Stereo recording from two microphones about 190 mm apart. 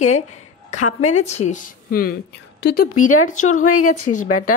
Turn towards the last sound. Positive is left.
turn(degrees=40)  # may be behind; listen again after turning